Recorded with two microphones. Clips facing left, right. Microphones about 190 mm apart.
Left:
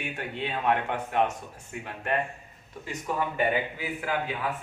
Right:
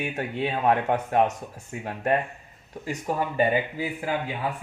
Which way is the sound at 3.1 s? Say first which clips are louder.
Right 2 dB; 40° right (ahead or behind).